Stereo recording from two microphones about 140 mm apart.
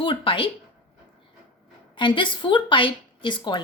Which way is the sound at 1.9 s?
35° left (ahead or behind).